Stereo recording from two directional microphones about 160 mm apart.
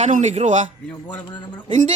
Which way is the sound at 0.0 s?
50° right (ahead or behind).